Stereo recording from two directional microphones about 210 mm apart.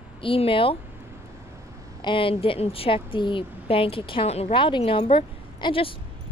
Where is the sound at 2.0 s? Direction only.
25° left (ahead or behind).